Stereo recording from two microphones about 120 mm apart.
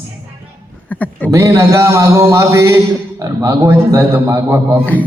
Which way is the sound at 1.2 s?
25° right (ahead or behind).